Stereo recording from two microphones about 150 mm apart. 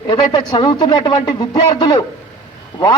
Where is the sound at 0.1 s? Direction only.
30° left (ahead or behind).